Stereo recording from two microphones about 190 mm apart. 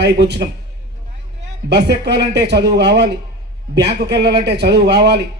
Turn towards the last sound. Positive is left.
turn(degrees=-60)  # may be behind; listen again after turning